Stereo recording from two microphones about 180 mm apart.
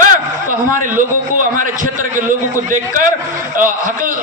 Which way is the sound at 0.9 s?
45° right (ahead or behind).